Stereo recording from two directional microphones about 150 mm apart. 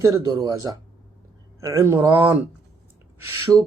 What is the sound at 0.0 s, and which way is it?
Speech, 25° right (ahead or behind).